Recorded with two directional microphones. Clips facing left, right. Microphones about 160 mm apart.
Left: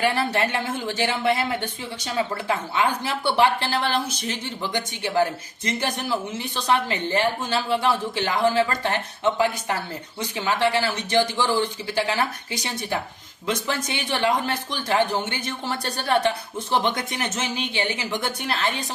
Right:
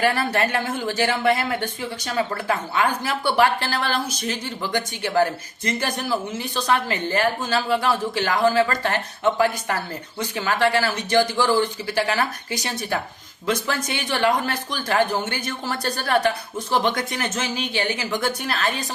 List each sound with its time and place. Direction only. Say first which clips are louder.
0.0 s speech: right 1 dB; 20° left (ahead or behind)
10.2 s speech: right 1 dB; 20° left (ahead or behind)